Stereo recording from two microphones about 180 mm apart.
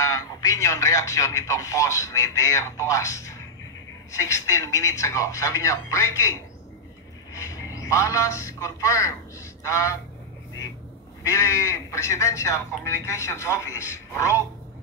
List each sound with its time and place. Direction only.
0.0 s speech: 20° left (ahead or behind)
7.3 s a man's voice: 15° left (ahead or behind)
11.2 s speech: 15° left (ahead or behind)